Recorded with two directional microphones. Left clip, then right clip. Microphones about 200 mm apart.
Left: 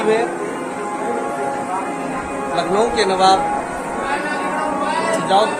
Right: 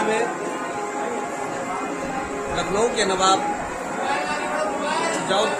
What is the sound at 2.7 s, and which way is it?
Speech, 15° left (ahead or behind).